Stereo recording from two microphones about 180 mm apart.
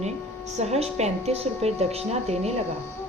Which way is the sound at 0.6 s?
35° right (ahead or behind).